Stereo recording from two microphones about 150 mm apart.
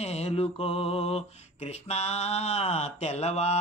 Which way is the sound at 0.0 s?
45° left (ahead or behind).